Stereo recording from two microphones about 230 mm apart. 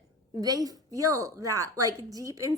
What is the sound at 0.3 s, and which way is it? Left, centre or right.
A woman's voice, centre.